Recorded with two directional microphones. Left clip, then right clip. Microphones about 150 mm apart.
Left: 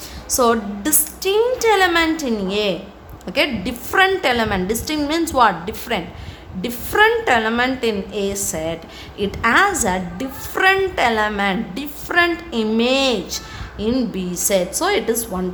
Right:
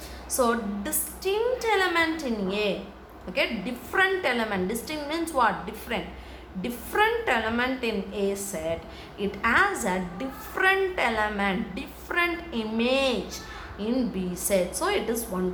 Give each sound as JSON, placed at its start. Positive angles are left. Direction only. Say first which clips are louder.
{"t": 0.3, "sound": "a woman's voice", "louder": "left 8 dB", "side_deg": 55}